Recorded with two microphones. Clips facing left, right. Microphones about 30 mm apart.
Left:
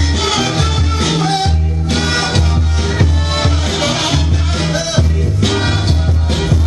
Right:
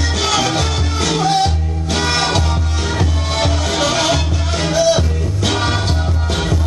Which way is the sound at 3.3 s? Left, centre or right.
Centre.